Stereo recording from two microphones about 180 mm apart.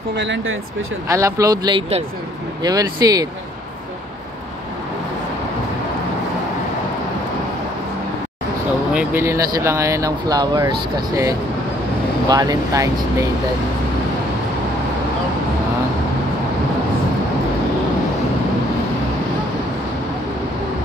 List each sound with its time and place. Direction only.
0.1 s speech: 85° right
1.0 s speech: 15° right (ahead or behind)
2.6 s speech: 20° right (ahead or behind)
8.9 s speech: 15° right (ahead or behind)